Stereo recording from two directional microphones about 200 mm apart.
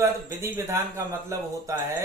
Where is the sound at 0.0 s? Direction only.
15° right (ahead or behind).